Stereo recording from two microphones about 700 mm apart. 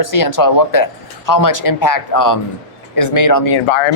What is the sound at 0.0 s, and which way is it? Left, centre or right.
Speech, left.